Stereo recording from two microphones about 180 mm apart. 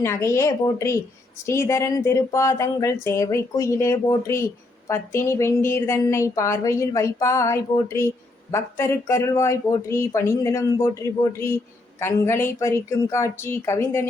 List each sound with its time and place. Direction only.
0.0 s a woman's voice: 15° left (ahead or behind)